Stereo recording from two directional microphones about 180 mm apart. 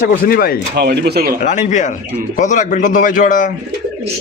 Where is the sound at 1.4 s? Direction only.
45° left (ahead or behind).